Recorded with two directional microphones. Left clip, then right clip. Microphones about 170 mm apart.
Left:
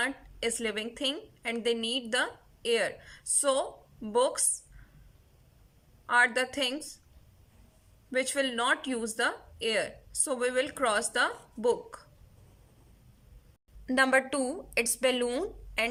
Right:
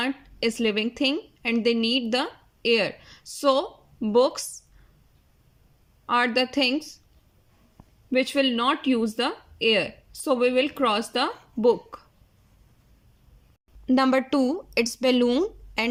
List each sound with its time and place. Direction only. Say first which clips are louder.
0.0 s a woman's voice: right 5 dB; 25° right (ahead or behind)
6.1 s speech: right 3 dB; 25° right (ahead or behind)
8.1 s speech: right 7 dB; 25° right (ahead or behind)
13.8 s speech: right 3 dB; 20° right (ahead or behind)